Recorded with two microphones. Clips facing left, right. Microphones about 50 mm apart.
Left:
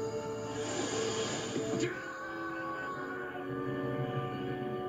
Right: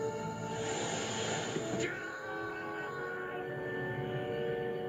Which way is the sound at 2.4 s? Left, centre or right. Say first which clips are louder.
Left 1 dB; right.